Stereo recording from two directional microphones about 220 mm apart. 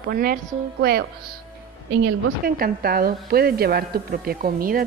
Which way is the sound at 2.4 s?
40° right (ahead or behind).